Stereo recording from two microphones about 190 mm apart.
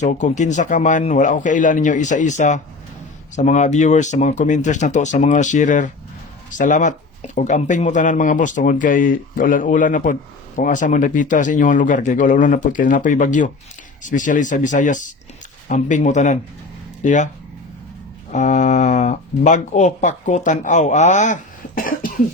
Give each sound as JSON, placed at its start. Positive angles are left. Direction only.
{"t": 0.0, "sound": "speech", "side_deg": 40}
{"t": 18.3, "sound": "speech", "side_deg": 40}
{"t": 21.8, "sound": "cough", "side_deg": 50}